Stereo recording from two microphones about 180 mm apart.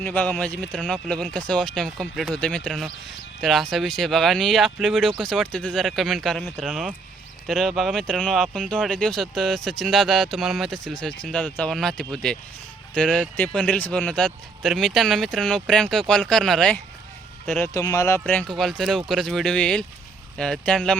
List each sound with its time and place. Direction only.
0.0 s speech: 10° left (ahead or behind)
17.5 s speech: 15° left (ahead or behind)
18.2 s speech: 5° left (ahead or behind)